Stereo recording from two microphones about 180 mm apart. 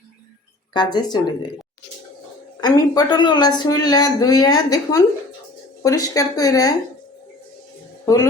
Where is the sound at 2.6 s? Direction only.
20° left (ahead or behind).